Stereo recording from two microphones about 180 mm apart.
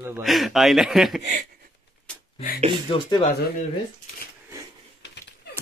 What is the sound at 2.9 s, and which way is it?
Speech, 30° left (ahead or behind).